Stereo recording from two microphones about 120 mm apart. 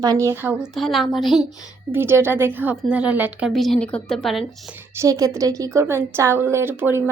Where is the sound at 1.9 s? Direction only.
20° right (ahead or behind).